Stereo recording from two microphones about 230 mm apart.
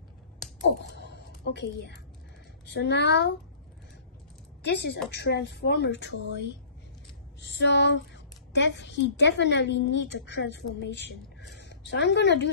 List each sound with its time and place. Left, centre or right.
0.7 s a woman's voice: left
4.6 s a woman's voice: left
7.4 s a woman's voice: left